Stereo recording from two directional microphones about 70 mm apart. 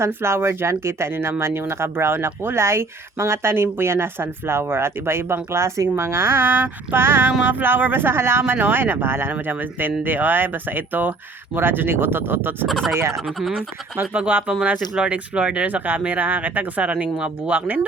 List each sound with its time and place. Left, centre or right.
0.0 s speech: right
12.6 s speech: centre
13.1 s speech: centre
13.9 s speech: right